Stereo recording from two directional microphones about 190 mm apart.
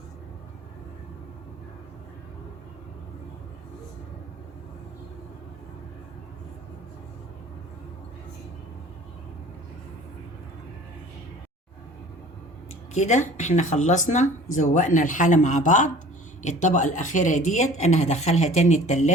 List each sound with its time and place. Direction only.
12.9 s speech: 40° left (ahead or behind)